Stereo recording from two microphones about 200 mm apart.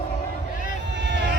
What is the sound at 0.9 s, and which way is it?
Vehicle, 60° right (ahead or behind).